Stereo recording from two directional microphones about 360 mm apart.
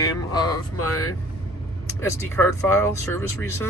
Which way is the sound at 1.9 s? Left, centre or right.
Centre.